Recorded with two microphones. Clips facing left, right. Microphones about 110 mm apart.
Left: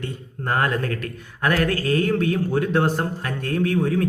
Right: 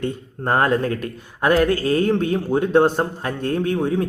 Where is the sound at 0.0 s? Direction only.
25° right (ahead or behind).